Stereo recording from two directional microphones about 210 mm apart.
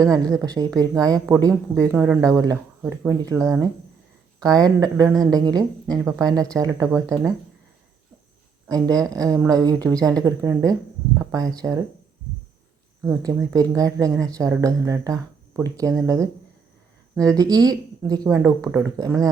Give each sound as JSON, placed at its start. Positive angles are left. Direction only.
{"t": 0.1, "sound": "a woman's voice", "side_deg": -15}
{"t": 8.6, "sound": "speech", "side_deg": -15}
{"t": 13.0, "sound": "speech", "side_deg": -15}
{"t": 17.3, "sound": "speech", "side_deg": -20}